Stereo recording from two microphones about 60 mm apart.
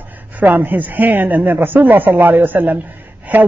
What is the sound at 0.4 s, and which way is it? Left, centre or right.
Speech, right.